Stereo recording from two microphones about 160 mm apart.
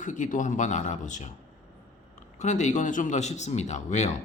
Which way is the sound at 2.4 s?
50° left (ahead or behind).